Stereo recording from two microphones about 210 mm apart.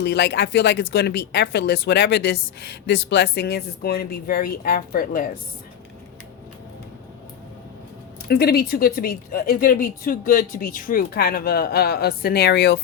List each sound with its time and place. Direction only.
0.0 s speech: 55° left (ahead or behind)
8.3 s speech: 45° left (ahead or behind)